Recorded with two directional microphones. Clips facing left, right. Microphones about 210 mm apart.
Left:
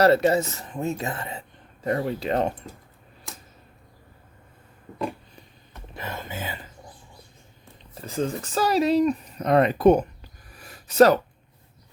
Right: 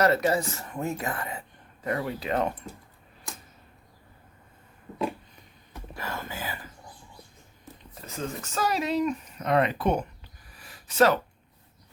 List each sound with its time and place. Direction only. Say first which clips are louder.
0.0 s speech: left 5 dB; 30° left (ahead or behind)
5.9 s speech: left 2 dB; 20° left (ahead or behind)
8.0 s speech: left 7 dB; 35° left (ahead or behind)
10.6 s a sound: left 6 dB; 40° left (ahead or behind)